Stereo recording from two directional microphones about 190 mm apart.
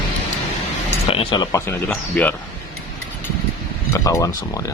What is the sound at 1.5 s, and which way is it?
Speech, 15° left (ahead or behind).